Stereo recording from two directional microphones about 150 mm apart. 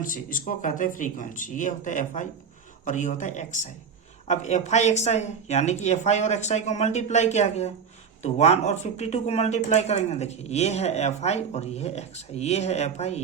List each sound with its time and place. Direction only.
0.0 s speech: 65° left (ahead or behind); by 13.2 s 45° left (ahead or behind)